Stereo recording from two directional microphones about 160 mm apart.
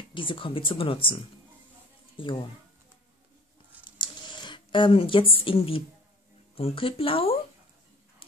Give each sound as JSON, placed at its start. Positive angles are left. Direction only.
{"t": 0.1, "sound": "speech", "side_deg": 30}
{"t": 3.8, "sound": "a sound", "side_deg": 30}
{"t": 6.5, "sound": "speech", "side_deg": 35}